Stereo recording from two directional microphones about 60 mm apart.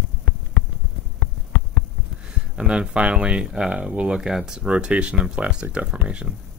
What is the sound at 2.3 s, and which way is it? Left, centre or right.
Speech, centre.